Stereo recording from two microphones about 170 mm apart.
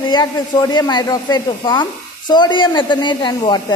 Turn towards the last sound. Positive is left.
turn(degrees=25)  # may be behind; listen again after turning